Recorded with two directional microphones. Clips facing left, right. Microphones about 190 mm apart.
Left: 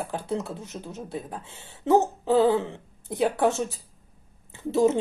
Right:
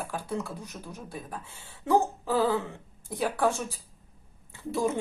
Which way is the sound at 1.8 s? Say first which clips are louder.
Left 4 dB; 25° left (ahead or behind).